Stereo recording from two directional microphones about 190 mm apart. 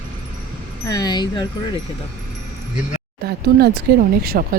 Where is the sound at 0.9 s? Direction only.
20° left (ahead or behind).